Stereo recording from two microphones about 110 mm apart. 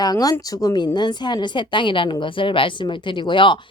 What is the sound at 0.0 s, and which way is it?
A woman's voice, 35° left (ahead or behind).